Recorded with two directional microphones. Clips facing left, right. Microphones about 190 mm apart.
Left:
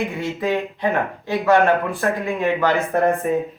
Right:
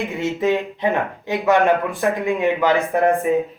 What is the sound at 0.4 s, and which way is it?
Speech, 20° right (ahead or behind).